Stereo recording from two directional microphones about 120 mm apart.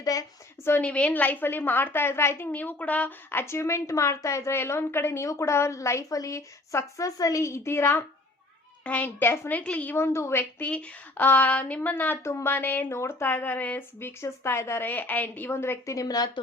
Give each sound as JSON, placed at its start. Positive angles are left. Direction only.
{"t": 0.0, "sound": "a woman's voice", "side_deg": 30}